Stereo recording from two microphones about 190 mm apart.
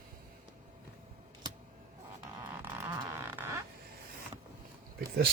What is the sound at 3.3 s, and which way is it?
Creak, 10° right (ahead or behind).